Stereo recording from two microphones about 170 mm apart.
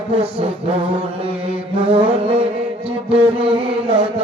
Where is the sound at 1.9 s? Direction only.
35° right (ahead or behind).